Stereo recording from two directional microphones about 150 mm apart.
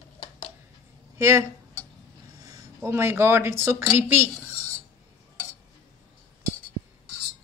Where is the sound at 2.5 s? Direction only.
20° right (ahead or behind).